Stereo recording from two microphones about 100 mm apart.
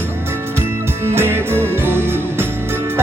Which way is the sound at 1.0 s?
25° right (ahead or behind).